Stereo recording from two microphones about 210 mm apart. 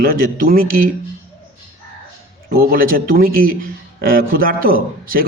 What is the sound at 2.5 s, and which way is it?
A man's voice, 45° right (ahead or behind).